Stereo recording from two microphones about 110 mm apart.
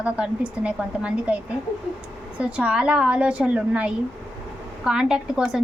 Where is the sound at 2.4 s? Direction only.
10° right (ahead or behind).